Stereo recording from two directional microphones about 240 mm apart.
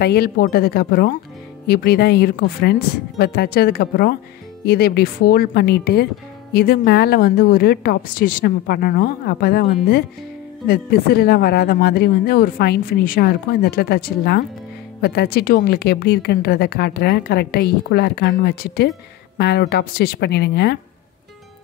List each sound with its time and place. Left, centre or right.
0.0 s a woman's voice: left